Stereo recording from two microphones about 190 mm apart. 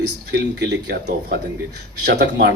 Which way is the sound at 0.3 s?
60° right (ahead or behind).